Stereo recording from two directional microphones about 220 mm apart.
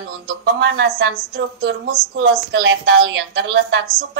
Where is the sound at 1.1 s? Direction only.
40° right (ahead or behind).